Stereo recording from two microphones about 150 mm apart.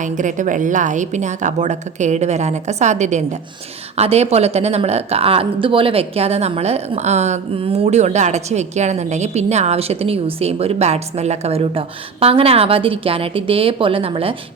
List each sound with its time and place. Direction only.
0.0 s speech: 55° right (ahead or behind); by 14.3 s 40° right (ahead or behind)